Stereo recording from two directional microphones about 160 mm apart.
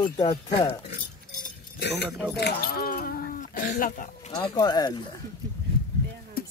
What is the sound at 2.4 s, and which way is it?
Speech, 80° left.